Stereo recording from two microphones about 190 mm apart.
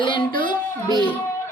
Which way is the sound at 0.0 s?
25° left (ahead or behind).